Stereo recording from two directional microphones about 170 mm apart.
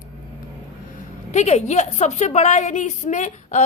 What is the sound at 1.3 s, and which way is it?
A woman's voice, 40° left (ahead or behind).